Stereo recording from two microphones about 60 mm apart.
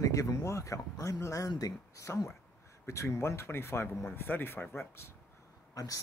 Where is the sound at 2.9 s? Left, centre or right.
Left.